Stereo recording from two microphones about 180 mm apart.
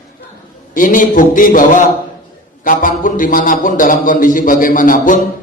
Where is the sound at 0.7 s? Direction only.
50° left (ahead or behind).